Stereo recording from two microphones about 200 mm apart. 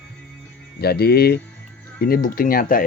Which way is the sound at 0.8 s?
55° left (ahead or behind).